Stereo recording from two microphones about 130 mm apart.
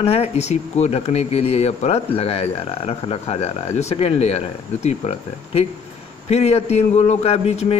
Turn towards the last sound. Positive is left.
turn(degrees=50)  # may be behind; listen again after turning